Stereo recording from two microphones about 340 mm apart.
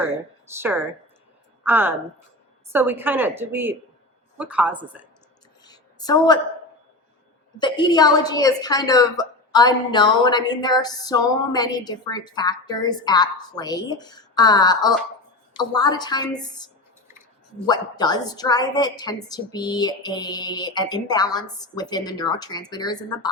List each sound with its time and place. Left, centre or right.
0.0 s a woman's voice: centre
5.6 s a sound: centre
7.6 s a woman's voice: centre
17.7 s a woman's voice: centre